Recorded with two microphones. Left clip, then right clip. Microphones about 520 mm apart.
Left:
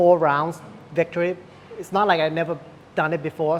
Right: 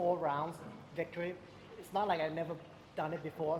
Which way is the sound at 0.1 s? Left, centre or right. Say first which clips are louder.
Left 17 dB; left.